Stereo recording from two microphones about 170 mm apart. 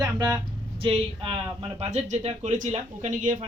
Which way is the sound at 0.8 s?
30° right (ahead or behind).